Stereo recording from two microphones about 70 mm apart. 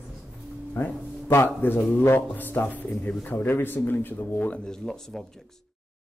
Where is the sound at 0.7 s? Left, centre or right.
Left.